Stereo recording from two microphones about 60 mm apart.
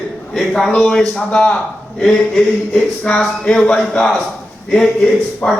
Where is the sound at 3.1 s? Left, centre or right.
Centre.